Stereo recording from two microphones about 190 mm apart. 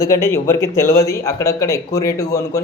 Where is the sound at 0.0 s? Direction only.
15° left (ahead or behind).